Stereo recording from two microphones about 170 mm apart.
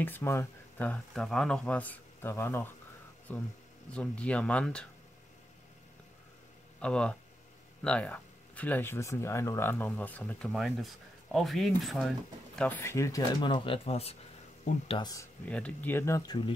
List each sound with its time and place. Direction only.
0.0 s speech: 15° left (ahead or behind)
6.8 s speech: 5° left (ahead or behind)
10.5 s speech: centre (ahead or behind); by 14.1 s 35° left (ahead or behind)
14.7 s speech: 45° left (ahead or behind)
15.0 s speech: 20° left (ahead or behind)
15.4 s speech: 10° left (ahead or behind); by 16.5 s 25° left (ahead or behind)